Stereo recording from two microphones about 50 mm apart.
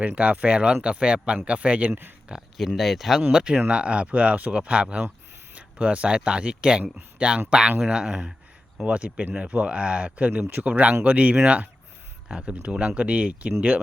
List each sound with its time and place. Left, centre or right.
0.0 s speech: right
1.9 s speech: right
2.6 s speech: centre
3.3 s speech: centre